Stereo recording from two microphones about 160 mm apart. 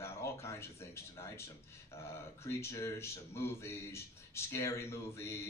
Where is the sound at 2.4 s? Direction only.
15° left (ahead or behind).